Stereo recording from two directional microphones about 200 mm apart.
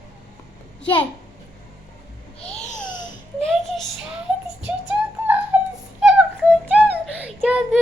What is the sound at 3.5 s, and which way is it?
Child singing, centre (ahead or behind).